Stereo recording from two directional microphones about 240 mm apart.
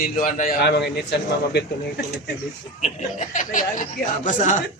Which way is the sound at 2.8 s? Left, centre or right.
Left.